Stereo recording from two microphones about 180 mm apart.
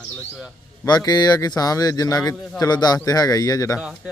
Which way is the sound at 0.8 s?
20° left (ahead or behind).